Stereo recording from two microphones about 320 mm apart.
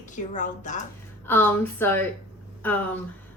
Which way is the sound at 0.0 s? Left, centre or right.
Left.